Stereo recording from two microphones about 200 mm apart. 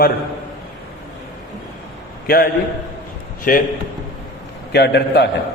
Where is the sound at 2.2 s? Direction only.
50° left (ahead or behind).